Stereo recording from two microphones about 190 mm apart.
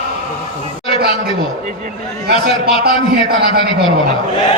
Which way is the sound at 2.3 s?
30° left (ahead or behind).